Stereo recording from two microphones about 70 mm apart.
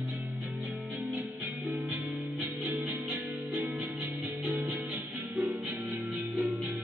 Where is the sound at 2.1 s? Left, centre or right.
Centre.